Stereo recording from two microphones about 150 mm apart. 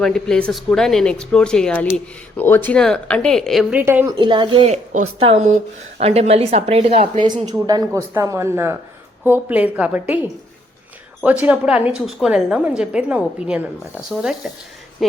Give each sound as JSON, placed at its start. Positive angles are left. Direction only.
{"t": 0.0, "sound": "speech", "side_deg": 5}
{"t": 3.8, "sound": "a woman's voice", "side_deg": -15}
{"t": 4.2, "sound": "speech", "side_deg": -30}
{"t": 4.6, "sound": "a woman's voice", "side_deg": -50}
{"t": 7.3, "sound": "a woman's voice", "side_deg": -30}